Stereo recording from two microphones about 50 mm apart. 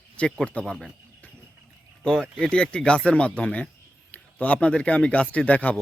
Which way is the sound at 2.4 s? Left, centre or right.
Centre.